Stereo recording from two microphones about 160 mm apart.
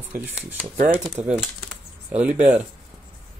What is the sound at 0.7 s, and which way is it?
Speech, 55° right (ahead or behind).